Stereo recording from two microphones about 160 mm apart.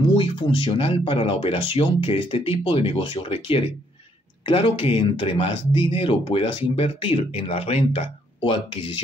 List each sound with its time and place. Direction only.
0.2 s speech: 35° left (ahead or behind)